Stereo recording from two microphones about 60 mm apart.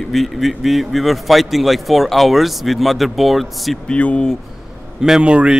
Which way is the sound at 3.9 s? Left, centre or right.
Centre.